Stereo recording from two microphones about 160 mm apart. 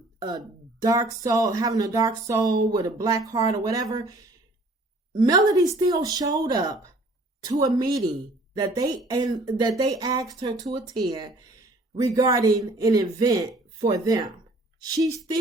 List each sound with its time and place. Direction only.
0.2 s speech: 25° right (ahead or behind)
5.3 s speech: 20° right (ahead or behind)